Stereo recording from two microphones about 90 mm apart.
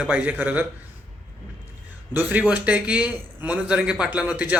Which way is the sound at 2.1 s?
20° right (ahead or behind).